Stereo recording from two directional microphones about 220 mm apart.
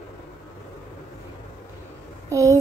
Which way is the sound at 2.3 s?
15° right (ahead or behind).